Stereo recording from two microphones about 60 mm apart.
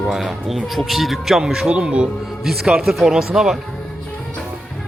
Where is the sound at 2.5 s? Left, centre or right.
Centre.